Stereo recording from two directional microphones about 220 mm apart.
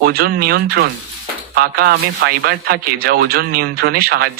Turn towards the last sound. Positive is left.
turn(degrees=-45)  # may be behind; listen again after turning